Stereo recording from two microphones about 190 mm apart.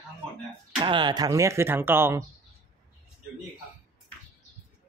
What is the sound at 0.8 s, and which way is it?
Speech, 25° right (ahead or behind).